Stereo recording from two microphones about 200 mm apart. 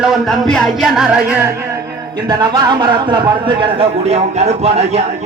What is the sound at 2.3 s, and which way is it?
Music, 20° right (ahead or behind).